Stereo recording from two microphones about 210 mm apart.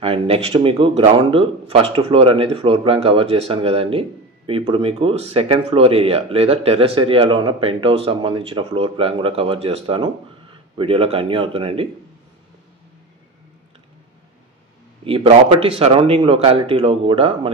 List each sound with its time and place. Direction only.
0.0 s speech: 25° right (ahead or behind)
15.0 s speech: 25° right (ahead or behind)